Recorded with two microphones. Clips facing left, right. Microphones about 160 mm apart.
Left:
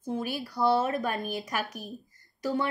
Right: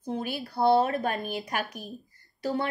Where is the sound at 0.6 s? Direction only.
40° right (ahead or behind).